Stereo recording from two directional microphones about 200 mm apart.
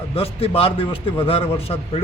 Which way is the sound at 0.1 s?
30° left (ahead or behind).